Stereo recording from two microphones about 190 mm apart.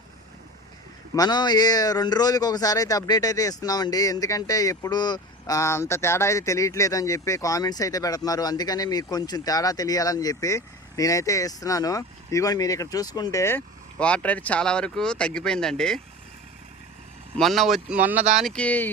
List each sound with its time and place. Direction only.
1.1 s speech: 20° left (ahead or behind); by 16.0 s 5° left (ahead or behind)
17.3 s speech: centre (ahead or behind)
18.4 s speech: 5° left (ahead or behind)